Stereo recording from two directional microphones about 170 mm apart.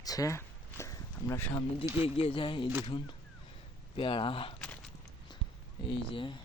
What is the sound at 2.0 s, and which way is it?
Speech, 35° left (ahead or behind).